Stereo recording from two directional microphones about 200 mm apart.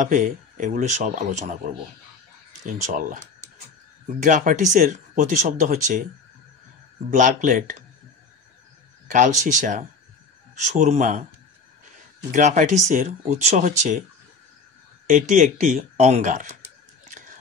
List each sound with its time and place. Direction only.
0.0 s speech: 40° right (ahead or behind)
2.6 s speech: 40° right (ahead or behind)
7.1 s speech: 40° right (ahead or behind)
9.0 s speech: 40° right (ahead or behind)
12.3 s speech: 40° right (ahead or behind)
15.0 s speech: 40° right (ahead or behind)